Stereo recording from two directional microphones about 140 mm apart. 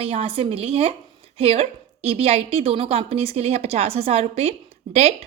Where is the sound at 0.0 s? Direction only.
45° right (ahead or behind).